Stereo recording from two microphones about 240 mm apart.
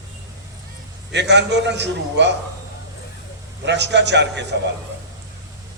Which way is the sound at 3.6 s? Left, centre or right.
Right.